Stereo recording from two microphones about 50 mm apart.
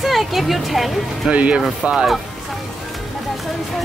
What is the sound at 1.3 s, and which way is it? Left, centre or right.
Speech, right.